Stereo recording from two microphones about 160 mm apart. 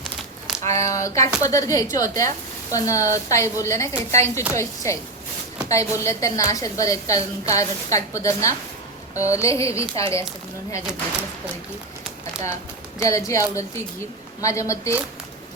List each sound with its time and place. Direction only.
0.7 s a woman's voice: 20° left (ahead or behind)
9.8 s speech: 35° right (ahead or behind)
13.0 s a woman's voice: 20° left (ahead or behind)